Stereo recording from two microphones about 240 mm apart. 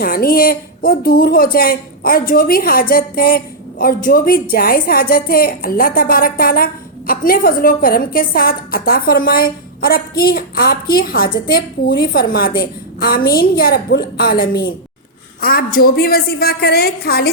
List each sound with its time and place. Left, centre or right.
0.0 s speech: left